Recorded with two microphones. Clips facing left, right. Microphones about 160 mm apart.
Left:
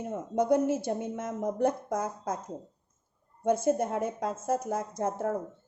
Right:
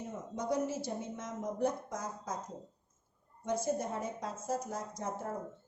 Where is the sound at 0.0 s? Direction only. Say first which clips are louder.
Left 10 dB; 55° left (ahead or behind).